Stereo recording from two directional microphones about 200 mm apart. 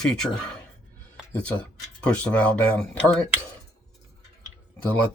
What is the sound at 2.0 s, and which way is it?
Speech, 5° left (ahead or behind).